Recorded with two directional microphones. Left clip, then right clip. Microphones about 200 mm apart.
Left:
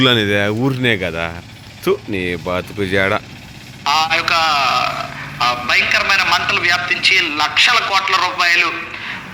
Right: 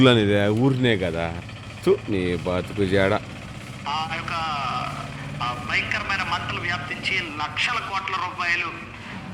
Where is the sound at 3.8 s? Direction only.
35° left (ahead or behind).